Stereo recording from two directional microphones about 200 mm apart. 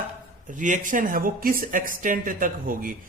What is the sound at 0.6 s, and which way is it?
A man's voice, 40° right (ahead or behind).